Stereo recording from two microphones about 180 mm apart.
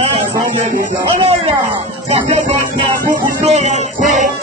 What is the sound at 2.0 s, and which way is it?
Music, 35° right (ahead or behind).